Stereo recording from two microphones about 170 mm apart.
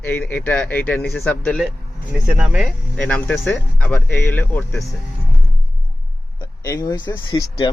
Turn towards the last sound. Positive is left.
turn(degrees=25)  # may be behind; listen again after turning